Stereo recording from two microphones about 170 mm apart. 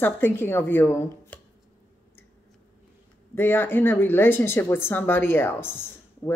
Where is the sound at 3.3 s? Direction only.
15° left (ahead or behind).